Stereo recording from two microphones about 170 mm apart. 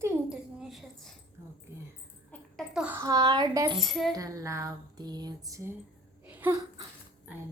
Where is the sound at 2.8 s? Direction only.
15° right (ahead or behind).